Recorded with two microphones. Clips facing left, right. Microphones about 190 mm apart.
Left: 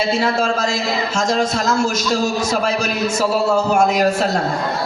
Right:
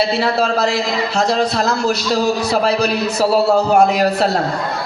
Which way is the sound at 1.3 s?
45° left (ahead or behind).